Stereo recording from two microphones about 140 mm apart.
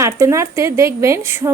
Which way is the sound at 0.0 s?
20° right (ahead or behind).